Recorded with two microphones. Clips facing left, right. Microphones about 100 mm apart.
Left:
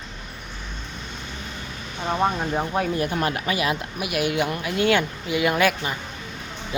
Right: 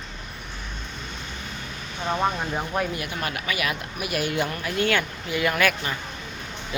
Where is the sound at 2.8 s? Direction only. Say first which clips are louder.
Left 5 dB; 40° left (ahead or behind).